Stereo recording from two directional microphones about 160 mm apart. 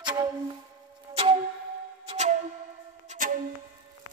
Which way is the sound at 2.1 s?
45° right (ahead or behind).